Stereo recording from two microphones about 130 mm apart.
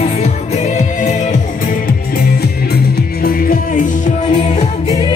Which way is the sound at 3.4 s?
90° left.